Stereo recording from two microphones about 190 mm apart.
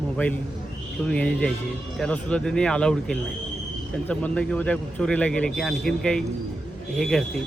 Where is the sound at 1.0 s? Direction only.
5° left (ahead or behind).